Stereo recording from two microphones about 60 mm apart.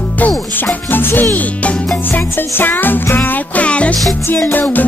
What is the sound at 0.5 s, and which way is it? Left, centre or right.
Music, left.